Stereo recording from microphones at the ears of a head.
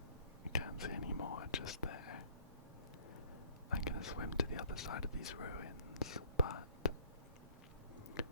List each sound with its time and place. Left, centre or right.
0.5 s whispering: left
3.7 s whispering: left